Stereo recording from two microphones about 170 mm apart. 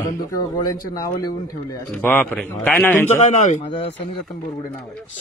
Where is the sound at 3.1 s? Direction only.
50° left (ahead or behind).